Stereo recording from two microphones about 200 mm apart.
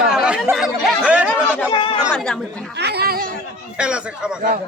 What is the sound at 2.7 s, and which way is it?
Speech, 55° right (ahead or behind).